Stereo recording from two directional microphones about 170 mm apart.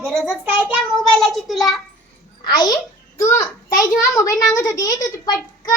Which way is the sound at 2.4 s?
25° left (ahead or behind).